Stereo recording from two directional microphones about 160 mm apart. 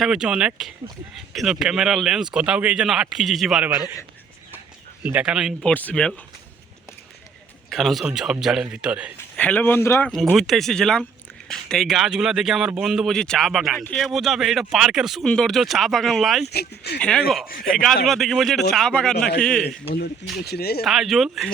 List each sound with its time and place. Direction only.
0.0 s speech: 5° right (ahead or behind)
3.8 s a man's voice: 25° left (ahead or behind)
5.0 s speech: 5° right (ahead or behind)
5.6 s speech: 10° left (ahead or behind)
7.7 s speech: centre (ahead or behind)
9.3 s speech: 10° left (ahead or behind)
10.3 s speech: centre (ahead or behind)
16.5 s speech: 90° left
17.0 s speech: 5° left (ahead or behind)
19.6 s speech: 90° left
20.8 s speech: centre (ahead or behind)